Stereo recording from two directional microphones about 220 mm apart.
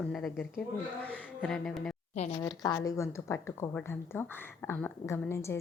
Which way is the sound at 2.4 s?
20° left (ahead or behind).